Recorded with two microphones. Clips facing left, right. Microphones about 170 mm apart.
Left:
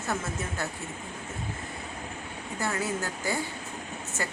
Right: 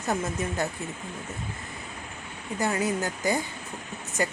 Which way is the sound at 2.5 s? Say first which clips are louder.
Right 4 dB; 15° right (ahead or behind).